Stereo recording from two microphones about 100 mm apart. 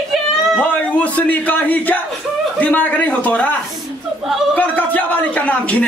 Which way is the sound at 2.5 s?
15° left (ahead or behind).